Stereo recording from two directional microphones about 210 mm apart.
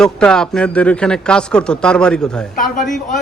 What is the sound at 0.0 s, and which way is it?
Speech, 5° left (ahead or behind).